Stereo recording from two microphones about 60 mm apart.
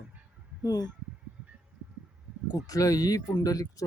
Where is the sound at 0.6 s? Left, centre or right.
Left.